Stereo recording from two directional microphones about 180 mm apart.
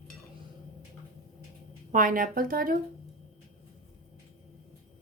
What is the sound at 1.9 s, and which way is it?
Speech, 50° right (ahead or behind).